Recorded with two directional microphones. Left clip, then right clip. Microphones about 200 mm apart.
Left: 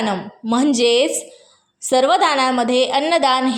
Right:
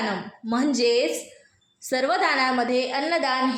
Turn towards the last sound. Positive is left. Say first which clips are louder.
# left 7 dB
turn(degrees=40)  # may be behind; listen again after turning